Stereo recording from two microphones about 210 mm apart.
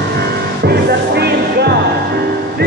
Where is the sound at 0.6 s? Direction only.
50° right (ahead or behind).